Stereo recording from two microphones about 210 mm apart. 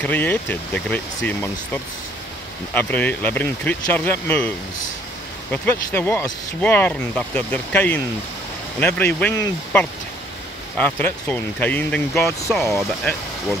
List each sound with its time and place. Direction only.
0.0 s speech: 5° left (ahead or behind)